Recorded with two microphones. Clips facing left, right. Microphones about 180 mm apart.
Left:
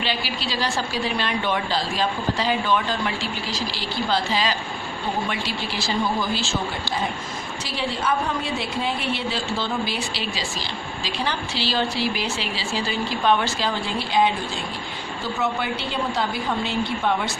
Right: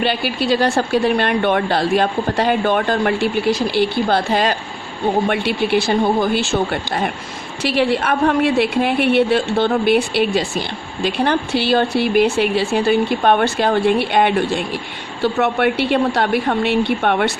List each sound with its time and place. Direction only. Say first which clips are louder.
0.0 s a woman's voice: right 8 dB; 55° right (ahead or behind)